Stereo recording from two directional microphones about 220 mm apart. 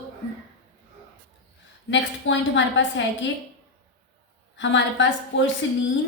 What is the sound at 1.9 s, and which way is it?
A woman's voice, 55° left (ahead or behind).